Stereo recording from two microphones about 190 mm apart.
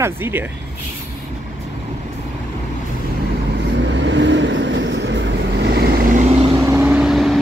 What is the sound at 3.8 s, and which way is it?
Vehicle, 70° right (ahead or behind).